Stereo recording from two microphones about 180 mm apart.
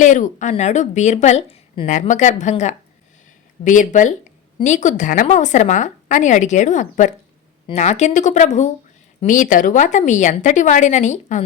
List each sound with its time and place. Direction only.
0.0 s a woman's voice: 45° left (ahead or behind)
1.9 s a woman's voice: 45° left (ahead or behind)